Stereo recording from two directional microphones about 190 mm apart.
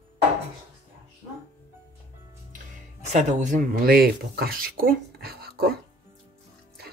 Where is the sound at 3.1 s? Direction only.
40° right (ahead or behind); by 5.8 s 55° right (ahead or behind).